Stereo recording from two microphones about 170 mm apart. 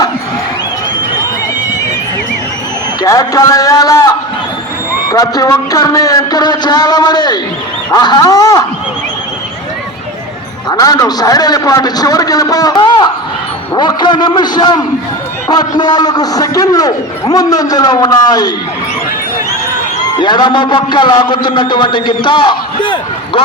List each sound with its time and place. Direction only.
3.0 s a man's voice: 20° left (ahead or behind)
10.7 s a man's voice: 20° left (ahead or behind)
20.2 s a man's voice: 25° left (ahead or behind)